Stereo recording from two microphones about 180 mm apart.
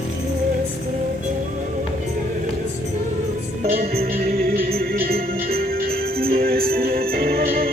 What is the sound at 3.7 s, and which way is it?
Music, 60° right (ahead or behind).